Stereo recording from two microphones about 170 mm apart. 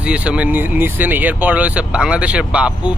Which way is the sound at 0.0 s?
5° right (ahead or behind).